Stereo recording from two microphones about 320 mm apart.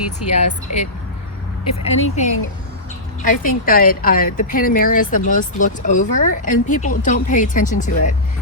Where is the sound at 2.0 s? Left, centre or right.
Left.